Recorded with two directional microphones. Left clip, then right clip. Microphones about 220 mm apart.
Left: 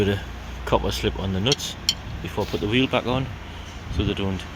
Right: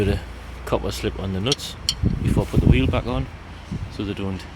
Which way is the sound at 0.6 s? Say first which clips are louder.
Left 2 dB; 15° right (ahead or behind).